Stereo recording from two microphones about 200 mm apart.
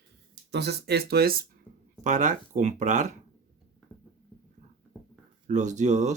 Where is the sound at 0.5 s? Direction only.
55° right (ahead or behind).